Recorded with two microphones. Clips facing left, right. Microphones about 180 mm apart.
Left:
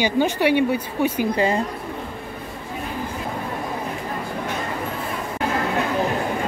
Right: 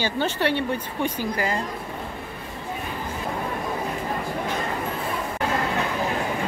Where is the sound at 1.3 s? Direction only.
25° left (ahead or behind).